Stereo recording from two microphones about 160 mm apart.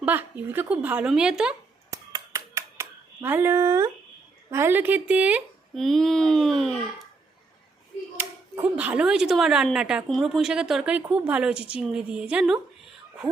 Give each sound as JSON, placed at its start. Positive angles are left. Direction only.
{"t": 0.0, "sound": "a woman's voice", "side_deg": -10}
{"t": 1.9, "sound": "a sound", "side_deg": -20}
{"t": 4.4, "sound": "a woman's voice", "side_deg": -15}
{"t": 5.8, "sound": "speech", "side_deg": 0}
{"t": 8.2, "sound": "speech", "side_deg": -10}